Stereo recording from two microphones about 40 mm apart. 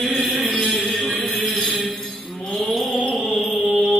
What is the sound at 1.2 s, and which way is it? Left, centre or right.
Music, centre.